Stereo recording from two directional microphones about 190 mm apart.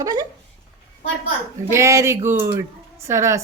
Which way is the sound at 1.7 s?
15° right (ahead or behind).